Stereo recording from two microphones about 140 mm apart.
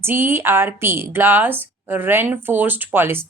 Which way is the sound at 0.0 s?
15° right (ahead or behind).